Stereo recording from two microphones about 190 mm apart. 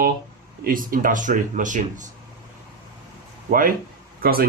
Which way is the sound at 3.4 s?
45° right (ahead or behind).